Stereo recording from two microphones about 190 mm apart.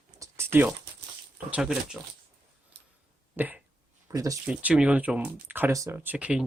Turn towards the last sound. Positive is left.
turn(degrees=-5)  # may be behind; listen again after turning